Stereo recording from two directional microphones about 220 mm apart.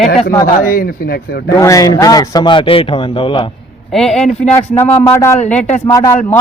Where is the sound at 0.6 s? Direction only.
40° left (ahead or behind).